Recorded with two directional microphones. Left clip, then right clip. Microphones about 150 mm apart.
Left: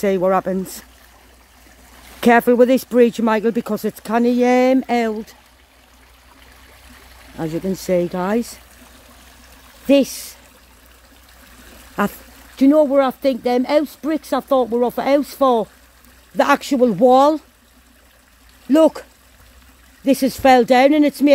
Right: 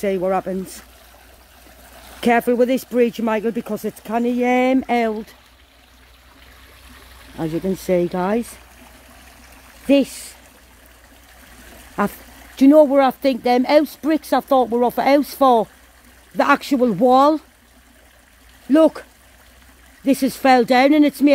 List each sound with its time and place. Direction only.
0.0 s speech: 40° left (ahead or behind)
2.1 s speech: 35° left (ahead or behind)
4.5 s speech: 25° left (ahead or behind)
7.7 s speech: 20° left (ahead or behind)
9.8 s speech: 25° left (ahead or behind)
11.6 s a sound: 20° left (ahead or behind)
12.5 s speech: centre (ahead or behind)
16.3 s speech: 15° left (ahead or behind)
18.7 s speech: 25° left (ahead or behind)
20.1 s speech: 20° left (ahead or behind)